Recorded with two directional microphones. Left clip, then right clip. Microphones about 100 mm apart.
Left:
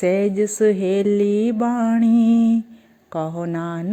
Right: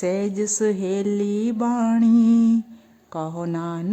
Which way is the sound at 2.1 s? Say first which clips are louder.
Even; 85° right.